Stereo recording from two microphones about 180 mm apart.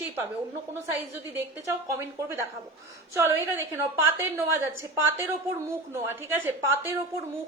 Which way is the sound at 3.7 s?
15° right (ahead or behind).